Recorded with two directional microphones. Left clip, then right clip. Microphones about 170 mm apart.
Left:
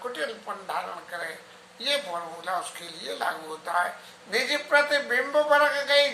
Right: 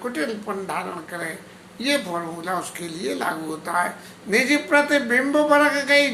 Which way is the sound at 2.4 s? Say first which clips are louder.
Right 4 dB; 20° right (ahead or behind).